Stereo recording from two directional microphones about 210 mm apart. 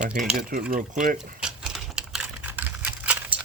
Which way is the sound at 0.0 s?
40° right (ahead or behind).